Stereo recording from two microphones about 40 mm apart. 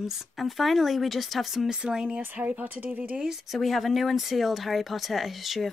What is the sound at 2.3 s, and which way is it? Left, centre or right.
Speech, right.